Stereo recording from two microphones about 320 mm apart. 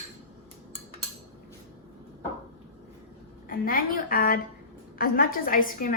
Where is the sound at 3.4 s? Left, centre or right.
Left.